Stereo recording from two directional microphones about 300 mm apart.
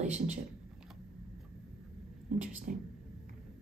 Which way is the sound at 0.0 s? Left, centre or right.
Right.